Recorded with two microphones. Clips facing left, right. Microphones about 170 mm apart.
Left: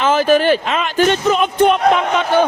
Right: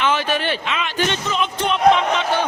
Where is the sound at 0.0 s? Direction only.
45° left (ahead or behind).